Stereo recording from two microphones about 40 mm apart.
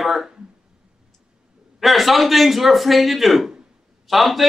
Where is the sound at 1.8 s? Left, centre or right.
Centre.